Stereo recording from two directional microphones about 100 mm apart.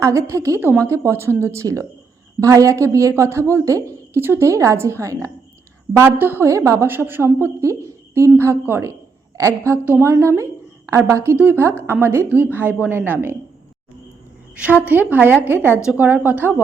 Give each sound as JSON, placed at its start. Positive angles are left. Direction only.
{"t": 0.0, "sound": "a woman's voice", "side_deg": -30}
{"t": 14.8, "sound": "speech", "side_deg": -15}